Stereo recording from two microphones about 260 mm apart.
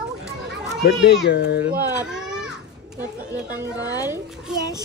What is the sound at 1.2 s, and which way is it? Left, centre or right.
Speech, left.